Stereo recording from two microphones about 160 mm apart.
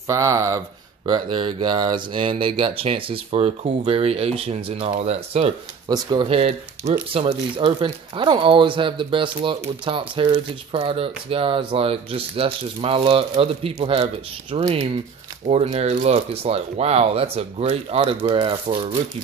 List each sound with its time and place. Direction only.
0.0 s speech: 20° right (ahead or behind); by 5.5 s 40° right (ahead or behind)
5.9 s speech: 25° right (ahead or behind)
6.2 s speech: 40° right (ahead or behind)